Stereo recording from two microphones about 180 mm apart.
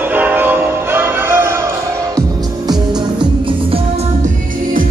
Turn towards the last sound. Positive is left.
turn(degrees=-30)  # may be behind; listen again after turning